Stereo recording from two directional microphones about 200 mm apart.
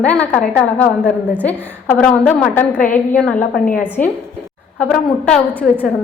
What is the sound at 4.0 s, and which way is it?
Speech, 40° left (ahead or behind).